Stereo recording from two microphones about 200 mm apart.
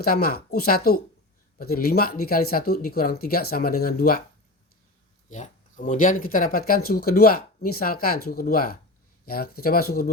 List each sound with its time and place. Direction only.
0.0 s speech: 50° left (ahead or behind)
5.3 s speech: 40° left (ahead or behind)